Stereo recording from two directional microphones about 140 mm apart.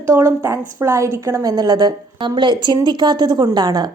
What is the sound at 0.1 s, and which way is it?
A woman's voice, 20° right (ahead or behind).